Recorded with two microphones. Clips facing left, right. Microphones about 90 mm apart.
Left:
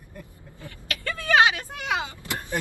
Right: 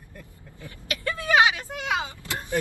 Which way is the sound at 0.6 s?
20° right (ahead or behind).